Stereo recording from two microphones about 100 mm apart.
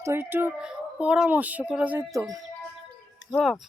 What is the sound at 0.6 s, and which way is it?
Music, 10° right (ahead or behind).